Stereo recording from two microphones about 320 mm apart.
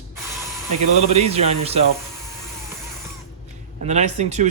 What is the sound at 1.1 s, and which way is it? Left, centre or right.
Speech, centre.